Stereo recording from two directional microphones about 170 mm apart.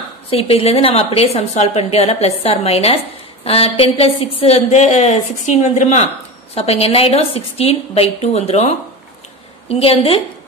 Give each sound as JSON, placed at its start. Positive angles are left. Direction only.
{"t": 0.3, "sound": "a woman's voice", "side_deg": 35}
{"t": 9.7, "sound": "a woman's voice", "side_deg": 35}